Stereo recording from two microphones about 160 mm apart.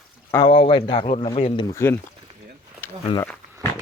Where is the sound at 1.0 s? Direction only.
40° left (ahead or behind).